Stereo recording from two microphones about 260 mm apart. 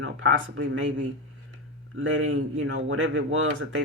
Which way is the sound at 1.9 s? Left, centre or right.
Right.